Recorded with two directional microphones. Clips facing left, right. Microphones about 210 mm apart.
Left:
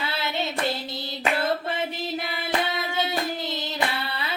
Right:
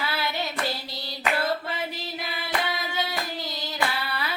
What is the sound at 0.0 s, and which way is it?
Hands, 25° left (ahead or behind).